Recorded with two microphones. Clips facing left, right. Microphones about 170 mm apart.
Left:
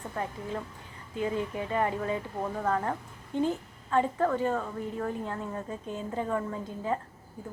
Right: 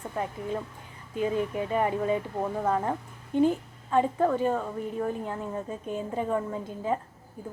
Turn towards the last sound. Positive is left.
turn(degrees=-15)  # may be behind; listen again after turning